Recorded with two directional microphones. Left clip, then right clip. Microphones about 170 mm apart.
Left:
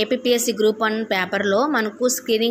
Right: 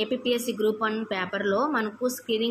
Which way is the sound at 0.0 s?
30° left (ahead or behind).